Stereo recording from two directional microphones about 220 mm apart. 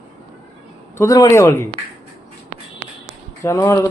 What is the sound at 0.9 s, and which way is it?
Speech, 15° left (ahead or behind).